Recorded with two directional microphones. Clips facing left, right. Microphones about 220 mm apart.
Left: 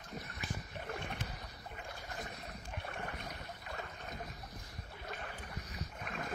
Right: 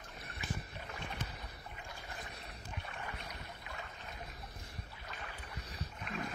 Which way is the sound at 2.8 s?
55° left (ahead or behind).